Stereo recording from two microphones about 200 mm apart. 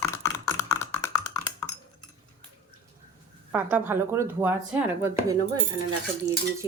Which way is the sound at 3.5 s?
10° right (ahead or behind).